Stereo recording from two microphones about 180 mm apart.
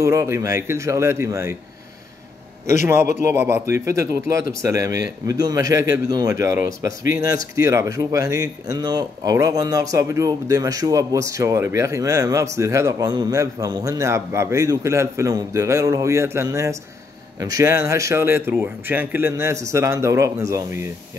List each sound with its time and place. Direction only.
0.0 s speech: 15° right (ahead or behind)
3.2 s speech: 15° right (ahead or behind)